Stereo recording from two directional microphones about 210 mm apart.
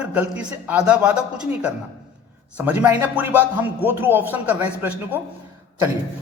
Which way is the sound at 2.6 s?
5° right (ahead or behind).